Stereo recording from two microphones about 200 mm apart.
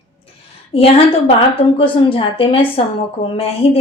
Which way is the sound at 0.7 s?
30° left (ahead or behind).